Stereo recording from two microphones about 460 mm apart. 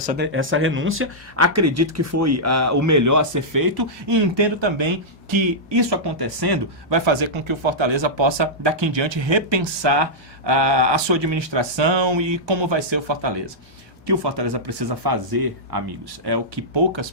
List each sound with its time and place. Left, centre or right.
0.0 s speech: centre; by 15.8 s right
16.2 s speech: right